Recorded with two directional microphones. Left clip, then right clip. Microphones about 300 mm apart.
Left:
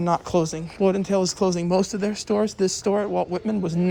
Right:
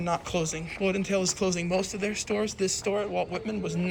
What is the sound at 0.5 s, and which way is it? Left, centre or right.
Speech, left.